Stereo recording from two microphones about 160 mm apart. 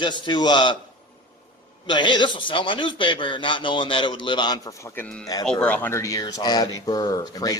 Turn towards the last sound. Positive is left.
turn(degrees=25)  # may be behind; listen again after turning